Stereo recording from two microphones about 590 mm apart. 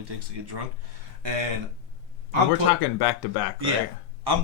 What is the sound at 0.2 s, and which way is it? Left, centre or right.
Speech, right.